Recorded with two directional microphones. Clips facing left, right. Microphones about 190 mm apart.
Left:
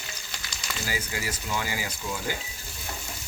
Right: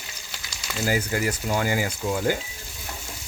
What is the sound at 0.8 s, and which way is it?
Speech, 50° right (ahead or behind).